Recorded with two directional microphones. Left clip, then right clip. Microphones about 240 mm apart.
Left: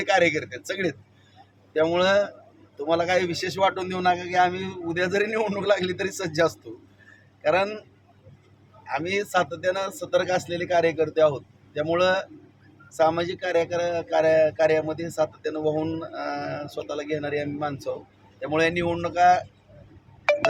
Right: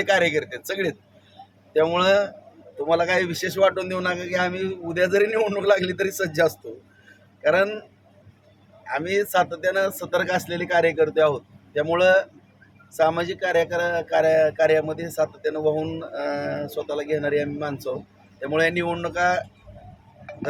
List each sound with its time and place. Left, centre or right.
0.0 s speech: centre
8.9 s speech: centre
20.3 s wind chime: left